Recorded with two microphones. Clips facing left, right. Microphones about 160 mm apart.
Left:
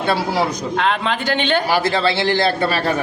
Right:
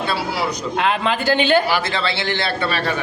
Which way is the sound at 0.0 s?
50° left (ahead or behind).